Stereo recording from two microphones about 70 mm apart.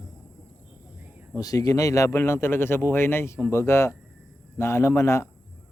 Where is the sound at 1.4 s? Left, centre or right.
Left.